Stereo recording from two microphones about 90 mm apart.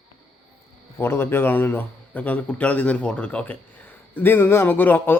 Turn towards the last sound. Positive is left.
turn(degrees=20)  # may be behind; listen again after turning